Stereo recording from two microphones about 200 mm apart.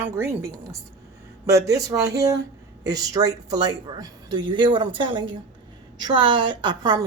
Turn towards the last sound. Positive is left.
turn(degrees=-20)  # may be behind; listen again after turning